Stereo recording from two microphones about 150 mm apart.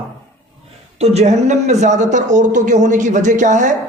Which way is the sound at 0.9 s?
45° right (ahead or behind).